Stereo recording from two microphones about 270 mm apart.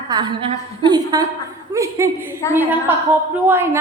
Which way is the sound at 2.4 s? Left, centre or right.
Centre.